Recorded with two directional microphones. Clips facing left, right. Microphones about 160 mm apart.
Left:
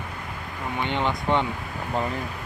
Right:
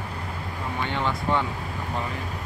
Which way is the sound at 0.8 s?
20° left (ahead or behind).